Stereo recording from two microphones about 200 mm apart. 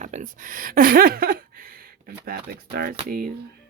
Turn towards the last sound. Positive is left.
turn(degrees=-45)  # may be behind; listen again after turning